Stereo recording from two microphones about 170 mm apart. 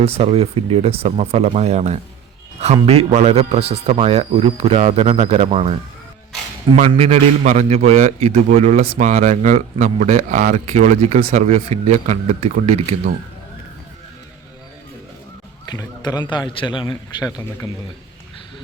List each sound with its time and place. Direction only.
0.0 s a man's voice: 40° right (ahead or behind)
6.7 s a man's voice: 35° right (ahead or behind)
15.6 s a man's voice: 25° left (ahead or behind)